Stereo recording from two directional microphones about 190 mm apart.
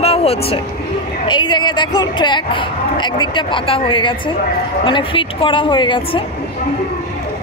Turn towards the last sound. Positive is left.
turn(degrees=25)  # may be behind; listen again after turning